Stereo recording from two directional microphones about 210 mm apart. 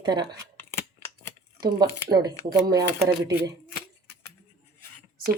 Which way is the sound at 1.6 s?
20° right (ahead or behind).